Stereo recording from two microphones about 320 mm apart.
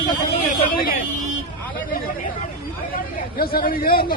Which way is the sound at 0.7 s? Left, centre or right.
Left.